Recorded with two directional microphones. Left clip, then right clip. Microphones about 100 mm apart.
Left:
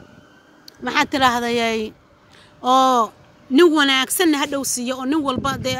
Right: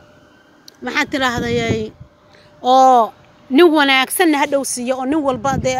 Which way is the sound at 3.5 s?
40° left (ahead or behind).